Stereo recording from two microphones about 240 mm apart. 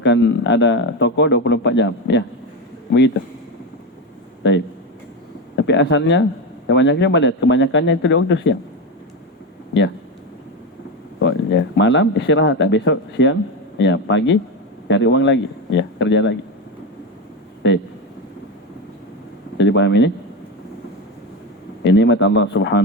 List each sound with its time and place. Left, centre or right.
0.0 s speech: left
5.6 s speech: left
11.2 s speech: left
17.6 s speech: left
19.5 s speech: left
21.8 s speech: left